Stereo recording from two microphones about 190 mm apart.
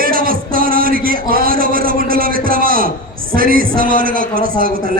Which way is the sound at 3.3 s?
50° right (ahead or behind).